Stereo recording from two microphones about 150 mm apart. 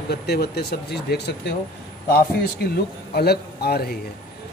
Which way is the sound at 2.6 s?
90° left.